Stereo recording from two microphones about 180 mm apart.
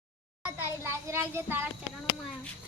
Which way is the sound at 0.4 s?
15° right (ahead or behind).